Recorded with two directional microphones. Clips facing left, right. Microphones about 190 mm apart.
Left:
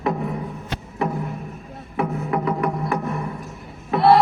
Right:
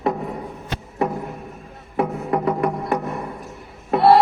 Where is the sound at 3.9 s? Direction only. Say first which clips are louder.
Right 1 dB; 40° right (ahead or behind).